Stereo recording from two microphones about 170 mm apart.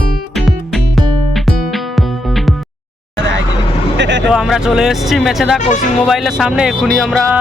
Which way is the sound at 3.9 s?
90° right.